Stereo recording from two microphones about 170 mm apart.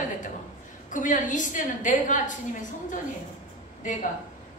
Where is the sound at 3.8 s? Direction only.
50° left (ahead or behind).